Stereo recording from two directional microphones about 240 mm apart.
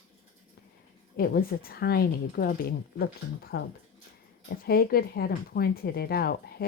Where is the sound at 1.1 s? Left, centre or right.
Left.